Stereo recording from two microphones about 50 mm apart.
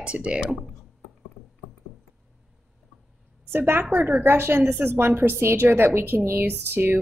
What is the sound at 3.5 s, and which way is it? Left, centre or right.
A woman's voice, right.